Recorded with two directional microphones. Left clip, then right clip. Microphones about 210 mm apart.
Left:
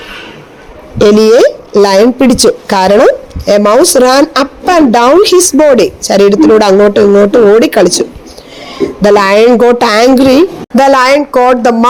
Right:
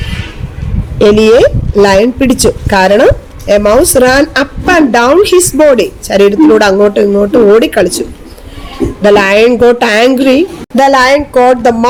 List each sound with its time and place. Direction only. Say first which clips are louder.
0.9 s a woman's voice: even; 25° left (ahead or behind)